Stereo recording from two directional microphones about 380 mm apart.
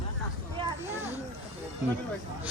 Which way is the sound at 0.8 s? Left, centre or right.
Centre.